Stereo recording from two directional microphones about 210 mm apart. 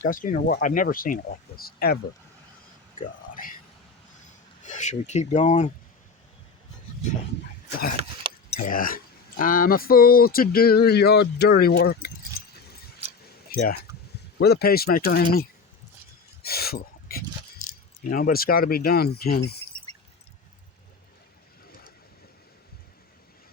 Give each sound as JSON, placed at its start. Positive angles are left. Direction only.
{"t": 0.1, "sound": "speech", "side_deg": 40}
{"t": 3.3, "sound": "speech", "side_deg": 40}
{"t": 4.6, "sound": "speech", "side_deg": 35}
{"t": 8.4, "sound": "a sound", "side_deg": 30}
{"t": 8.7, "sound": "speech", "side_deg": 40}
{"t": 13.5, "sound": "speech", "side_deg": 45}
{"t": 21.7, "sound": "vehicle", "side_deg": 45}